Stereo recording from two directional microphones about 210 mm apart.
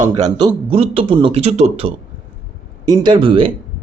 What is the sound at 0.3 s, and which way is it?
Speech, 25° right (ahead or behind).